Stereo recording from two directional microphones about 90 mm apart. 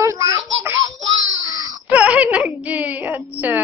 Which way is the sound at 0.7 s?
40° right (ahead or behind).